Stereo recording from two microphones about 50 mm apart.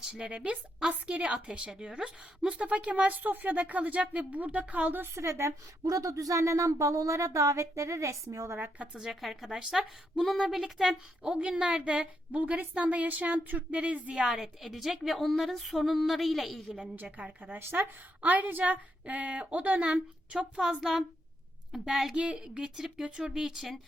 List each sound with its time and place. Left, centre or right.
0.0 s a sound: centre
0.8 s a woman's voice: centre
2.5 s a woman's voice: right
5.1 s a woman's voice: right
6.0 s speech: right
8.5 s speech: right
9.0 s a woman's voice: centre
11.3 s a woman's voice: centre
12.3 s speech: right
13.7 s a woman's voice: right
14.2 s a woman's voice: centre
17.1 s a woman's voice: right; by 22.1 s centre
22.1 s a woman's voice: right; by 23.8 s centre